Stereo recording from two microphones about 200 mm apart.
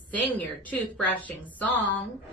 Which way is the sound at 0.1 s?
10° left (ahead or behind).